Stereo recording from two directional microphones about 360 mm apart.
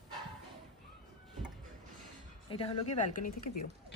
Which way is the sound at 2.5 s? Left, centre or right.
Centre.